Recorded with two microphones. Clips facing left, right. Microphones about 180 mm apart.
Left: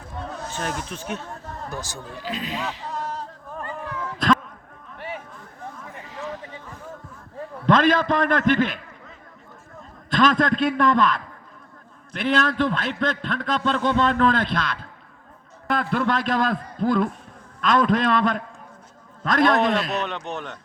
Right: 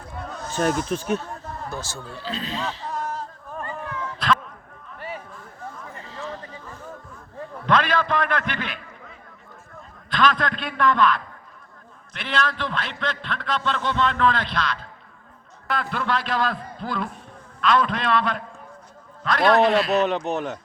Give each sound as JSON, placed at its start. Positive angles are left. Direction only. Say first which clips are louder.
{"t": 0.5, "sound": "speech", "louder": "right 10 dB", "side_deg": -40}
{"t": 1.7, "sound": "speech", "louder": "even", "side_deg": 15}
{"t": 6.0, "sound": "a sound", "louder": "left 2 dB", "side_deg": 15}
{"t": 7.7, "sound": "a man's voice", "louder": "left 3 dB", "side_deg": 45}
{"t": 10.1, "sound": "a man's voice", "louder": "left 3 dB", "side_deg": 45}
{"t": 19.5, "sound": "a man's voice", "louder": "right 3 dB", "side_deg": 0}
{"t": 20.0, "sound": "speech", "louder": "right 7 dB", "side_deg": -40}